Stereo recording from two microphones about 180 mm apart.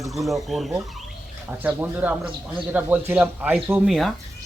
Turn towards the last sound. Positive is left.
turn(degrees=0)  # may be behind; listen again after turning